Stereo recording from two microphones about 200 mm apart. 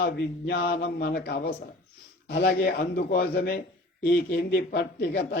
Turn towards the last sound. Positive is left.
turn(degrees=55)  # may be behind; listen again after turning